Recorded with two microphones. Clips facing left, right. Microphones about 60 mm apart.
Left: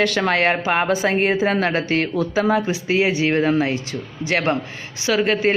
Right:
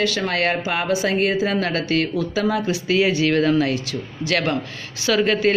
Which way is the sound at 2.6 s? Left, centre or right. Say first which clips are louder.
Even; centre.